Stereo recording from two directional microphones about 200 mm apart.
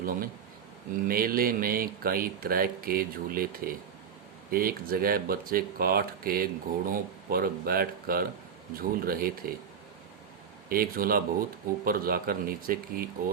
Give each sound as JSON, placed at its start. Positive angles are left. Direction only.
{"t": 0.0, "sound": "speech", "side_deg": -45}
{"t": 10.7, "sound": "speech", "side_deg": -45}